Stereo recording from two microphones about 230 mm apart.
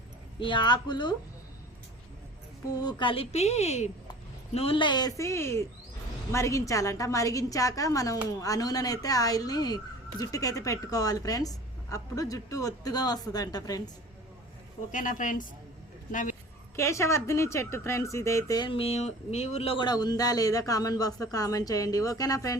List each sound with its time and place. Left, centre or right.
0.3 s a woman's voice: left
2.8 s a woman's voice: left
14.9 s a woman's voice: left
16.7 s speech: centre